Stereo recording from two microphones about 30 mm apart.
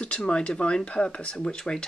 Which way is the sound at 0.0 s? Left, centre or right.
Left.